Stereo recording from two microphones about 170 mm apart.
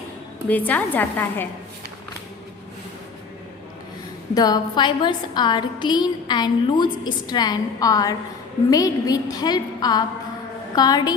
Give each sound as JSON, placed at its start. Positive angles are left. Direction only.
{"t": 0.4, "sound": "a woman's voice", "side_deg": 10}
{"t": 4.4, "sound": "a woman's voice", "side_deg": 25}